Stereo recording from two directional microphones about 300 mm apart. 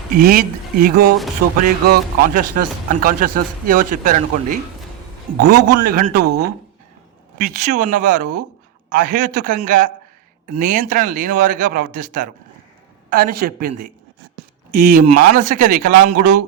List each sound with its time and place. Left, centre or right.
0.1 s a man's voice: right
7.3 s speech: right